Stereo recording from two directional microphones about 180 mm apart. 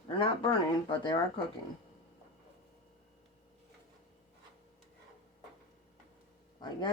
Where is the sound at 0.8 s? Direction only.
25° left (ahead or behind).